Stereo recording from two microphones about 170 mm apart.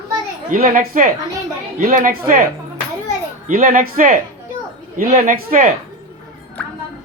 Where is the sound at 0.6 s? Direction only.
50° right (ahead or behind).